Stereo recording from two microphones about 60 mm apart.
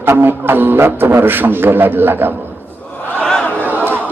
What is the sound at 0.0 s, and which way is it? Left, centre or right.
A man's voice, right.